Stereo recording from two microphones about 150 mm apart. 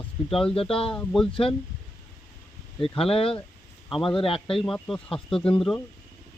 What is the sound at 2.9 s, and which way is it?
A man's voice, 40° left (ahead or behind).